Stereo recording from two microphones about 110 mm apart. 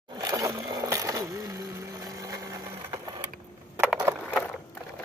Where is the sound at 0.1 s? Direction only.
35° right (ahead or behind).